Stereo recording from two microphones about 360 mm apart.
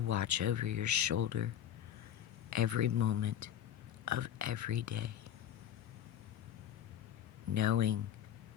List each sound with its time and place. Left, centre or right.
0.0 s speech: right
2.5 s speech: right
7.5 s speech: right